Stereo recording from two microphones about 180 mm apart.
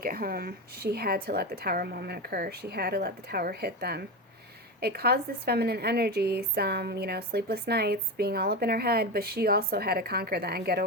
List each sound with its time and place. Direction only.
0.0 s a woman's voice: 55° right (ahead or behind)